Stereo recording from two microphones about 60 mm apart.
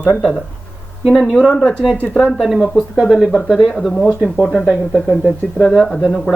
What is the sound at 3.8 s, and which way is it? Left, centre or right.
Speech, centre.